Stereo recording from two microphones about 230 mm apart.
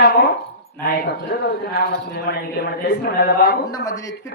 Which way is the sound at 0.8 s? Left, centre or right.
Left.